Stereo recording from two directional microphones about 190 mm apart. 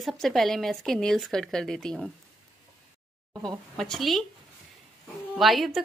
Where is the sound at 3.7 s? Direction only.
Centre (ahead or behind).